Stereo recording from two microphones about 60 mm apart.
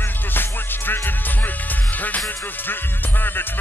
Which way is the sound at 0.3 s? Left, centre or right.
Left.